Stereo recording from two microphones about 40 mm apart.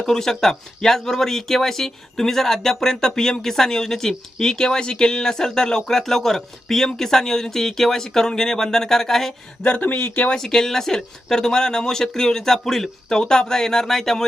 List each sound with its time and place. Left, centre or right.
0.0 s speech: centre
9.8 s speech: left
10.3 s speech: centre